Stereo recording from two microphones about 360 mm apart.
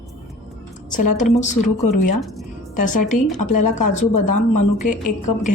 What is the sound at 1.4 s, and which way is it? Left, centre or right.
Speech, centre.